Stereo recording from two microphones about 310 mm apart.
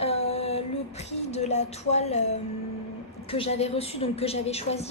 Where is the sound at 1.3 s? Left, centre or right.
Left.